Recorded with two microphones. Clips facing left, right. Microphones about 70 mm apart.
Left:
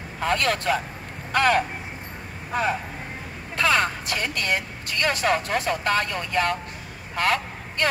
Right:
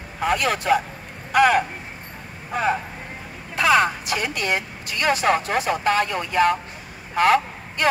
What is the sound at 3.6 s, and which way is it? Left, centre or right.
Speech, centre.